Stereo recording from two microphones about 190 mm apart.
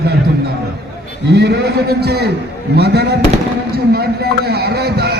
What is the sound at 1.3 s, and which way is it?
A man's voice, 60° right (ahead or behind).